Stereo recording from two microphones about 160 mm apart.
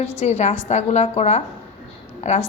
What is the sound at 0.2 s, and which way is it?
A woman's voice, 45° left (ahead or behind).